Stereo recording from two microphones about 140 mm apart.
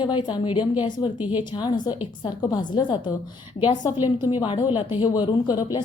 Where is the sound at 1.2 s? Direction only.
10° right (ahead or behind).